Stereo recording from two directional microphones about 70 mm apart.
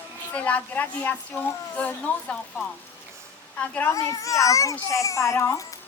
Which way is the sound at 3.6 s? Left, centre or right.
Left.